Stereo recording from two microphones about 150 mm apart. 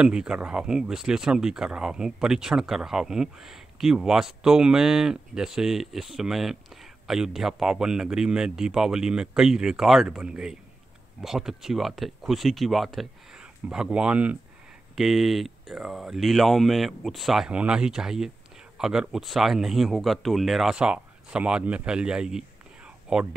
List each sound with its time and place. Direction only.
0.0 s speech: 5° right (ahead or behind)